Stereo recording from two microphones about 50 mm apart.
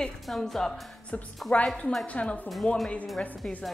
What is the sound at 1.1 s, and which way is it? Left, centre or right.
A woman's voice, left.